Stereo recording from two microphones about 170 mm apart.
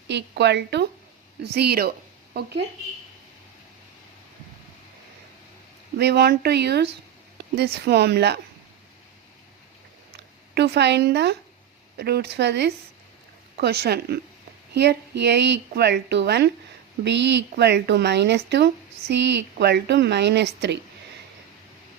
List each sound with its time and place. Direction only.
0.1 s speech: 90° right
6.0 s speech: 80° right
10.1 s speech: 75° right (ahead or behind)
11.9 s speech: 70° right (ahead or behind); by 12.7 s 90° right
13.6 s speech: 70° right (ahead or behind)
14.7 s speech: 80° right